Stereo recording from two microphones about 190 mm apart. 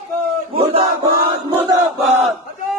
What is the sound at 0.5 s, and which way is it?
Battle cry, 30° right (ahead or behind).